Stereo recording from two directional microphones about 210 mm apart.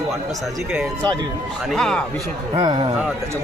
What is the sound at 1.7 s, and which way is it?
Speech, centre (ahead or behind).